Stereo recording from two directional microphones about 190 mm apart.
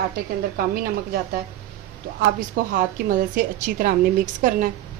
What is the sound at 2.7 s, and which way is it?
A woman's voice, 45° right (ahead or behind).